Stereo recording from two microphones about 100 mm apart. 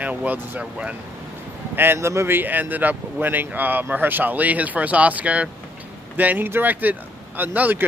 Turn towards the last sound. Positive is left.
turn(degrees=-15)  # may be behind; listen again after turning